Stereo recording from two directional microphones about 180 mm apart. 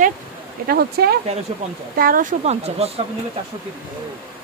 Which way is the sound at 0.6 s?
60° right (ahead or behind).